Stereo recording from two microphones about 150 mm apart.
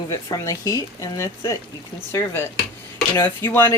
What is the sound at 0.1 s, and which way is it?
Speech, 25° left (ahead or behind).